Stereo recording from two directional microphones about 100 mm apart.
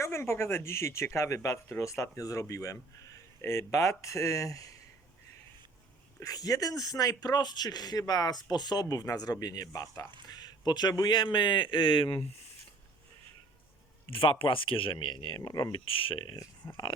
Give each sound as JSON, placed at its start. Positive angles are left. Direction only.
{"t": 0.0, "sound": "a man's voice", "side_deg": 25}
{"t": 6.1, "sound": "a man's voice", "side_deg": 35}
{"t": 14.1, "sound": "speech", "side_deg": 60}
{"t": 15.4, "sound": "a man's voice", "side_deg": 40}
{"t": 15.9, "sound": "speech", "side_deg": 65}
{"t": 16.6, "sound": "a man's voice", "side_deg": 30}